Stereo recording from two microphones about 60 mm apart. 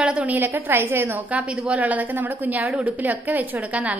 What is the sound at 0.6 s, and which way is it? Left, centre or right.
Speech, right.